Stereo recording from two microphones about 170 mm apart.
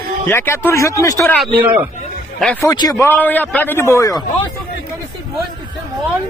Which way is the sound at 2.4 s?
5° left (ahead or behind).